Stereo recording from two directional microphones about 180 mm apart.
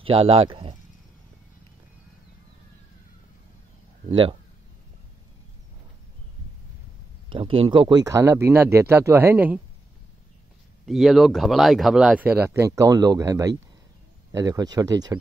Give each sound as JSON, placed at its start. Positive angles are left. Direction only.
{"t": 0.0, "sound": "speech", "side_deg": -30}
{"t": 4.1, "sound": "speech", "side_deg": -30}
{"t": 7.2, "sound": "speech", "side_deg": -30}
{"t": 10.9, "sound": "speech", "side_deg": 0}